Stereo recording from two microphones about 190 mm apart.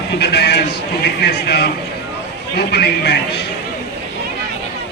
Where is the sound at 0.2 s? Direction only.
60° left (ahead or behind).